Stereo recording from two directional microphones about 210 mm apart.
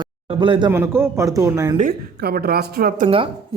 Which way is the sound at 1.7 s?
45° right (ahead or behind).